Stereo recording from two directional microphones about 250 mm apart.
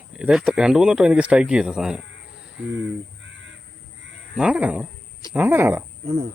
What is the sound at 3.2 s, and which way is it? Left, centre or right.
Crow, right.